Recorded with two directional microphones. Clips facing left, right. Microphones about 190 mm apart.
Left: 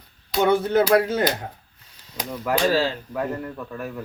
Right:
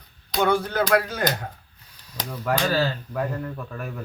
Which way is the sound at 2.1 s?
5° left (ahead or behind).